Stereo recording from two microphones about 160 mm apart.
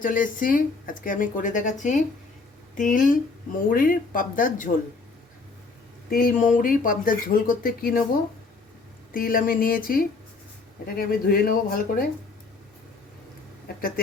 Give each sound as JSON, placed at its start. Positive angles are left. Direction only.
{"t": 0.0, "sound": "speech", "side_deg": 55}
{"t": 6.1, "sound": "speech", "side_deg": 65}
{"t": 9.1, "sound": "speech", "side_deg": 60}